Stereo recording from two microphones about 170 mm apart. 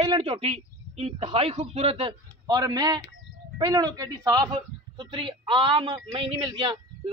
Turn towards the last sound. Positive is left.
turn(degrees=-30)  # may be behind; listen again after turning